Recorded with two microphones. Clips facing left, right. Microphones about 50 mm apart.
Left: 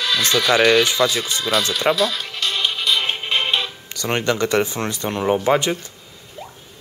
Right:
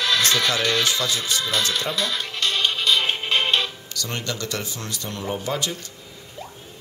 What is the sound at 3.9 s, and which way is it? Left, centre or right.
Speech, left.